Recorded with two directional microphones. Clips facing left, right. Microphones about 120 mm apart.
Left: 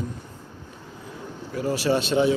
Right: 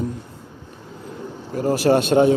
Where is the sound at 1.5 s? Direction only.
50° right (ahead or behind).